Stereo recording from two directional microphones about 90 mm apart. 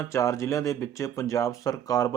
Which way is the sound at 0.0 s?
35° left (ahead or behind).